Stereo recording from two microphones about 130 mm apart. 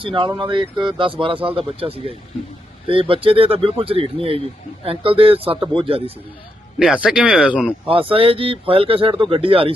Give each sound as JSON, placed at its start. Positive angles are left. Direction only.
{"t": 0.0, "sound": "speech", "side_deg": -40}
{"t": 6.7, "sound": "speech", "side_deg": -10}
{"t": 8.1, "sound": "speech", "side_deg": -45}